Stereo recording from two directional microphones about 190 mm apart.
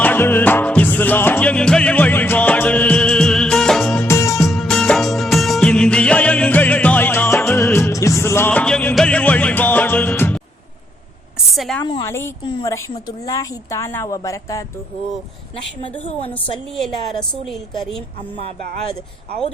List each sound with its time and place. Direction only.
0.0 s music: 10° left (ahead or behind)
4.0 s music of bollywood: 15° left (ahead or behind)
4.4 s music of bollywood: centre (ahead or behind)
11.5 s a sound: centre (ahead or behind)
11.8 s a sound: 25° left (ahead or behind)
12.0 s speech: 15° left (ahead or behind)
12.4 s a woman's voice: 25° left (ahead or behind)
16.8 s a woman's voice: centre (ahead or behind)